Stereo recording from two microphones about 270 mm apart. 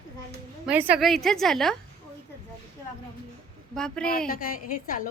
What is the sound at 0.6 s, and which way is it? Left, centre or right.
A woman's voice, centre.